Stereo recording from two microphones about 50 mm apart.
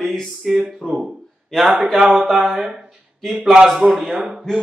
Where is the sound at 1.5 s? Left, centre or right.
Centre.